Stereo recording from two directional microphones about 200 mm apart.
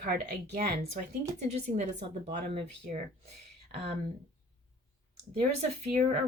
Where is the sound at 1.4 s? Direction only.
35° right (ahead or behind).